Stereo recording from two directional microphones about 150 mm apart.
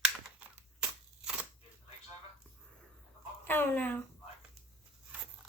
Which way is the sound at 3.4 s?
15° left (ahead or behind).